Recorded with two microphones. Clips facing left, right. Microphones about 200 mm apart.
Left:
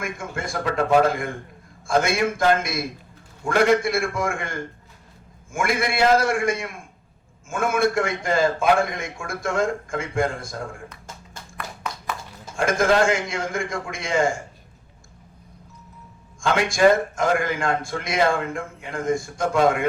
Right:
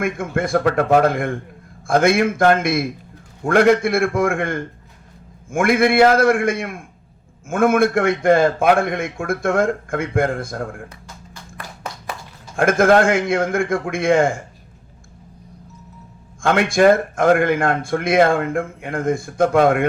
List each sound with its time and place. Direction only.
0.0 s a man's voice: 55° right (ahead or behind)
12.5 s a man's voice: 55° right (ahead or behind)
16.4 s a man's voice: 55° right (ahead or behind)